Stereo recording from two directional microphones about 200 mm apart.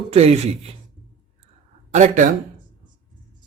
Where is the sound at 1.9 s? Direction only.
35° right (ahead or behind).